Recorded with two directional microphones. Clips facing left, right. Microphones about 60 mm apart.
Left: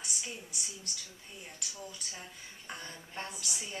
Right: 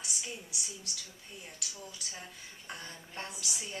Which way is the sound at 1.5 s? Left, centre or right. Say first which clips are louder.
Left 1 dB; centre.